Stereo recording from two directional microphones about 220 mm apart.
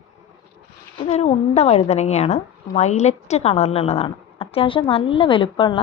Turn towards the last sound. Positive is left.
turn(degrees=25)  # may be behind; listen again after turning